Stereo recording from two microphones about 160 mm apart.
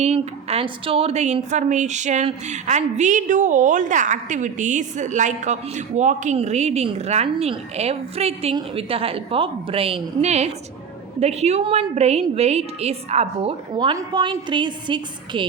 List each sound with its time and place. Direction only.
0.0 s a woman's voice: 40° right (ahead or behind)
13.7 s a woman's voice: 25° right (ahead or behind)